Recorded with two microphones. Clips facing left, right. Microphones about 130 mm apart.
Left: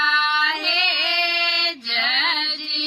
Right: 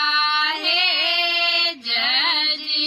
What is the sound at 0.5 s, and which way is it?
Music, 5° right (ahead or behind).